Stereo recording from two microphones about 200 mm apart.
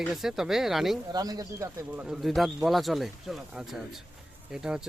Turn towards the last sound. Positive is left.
turn(degrees=-5)  # may be behind; listen again after turning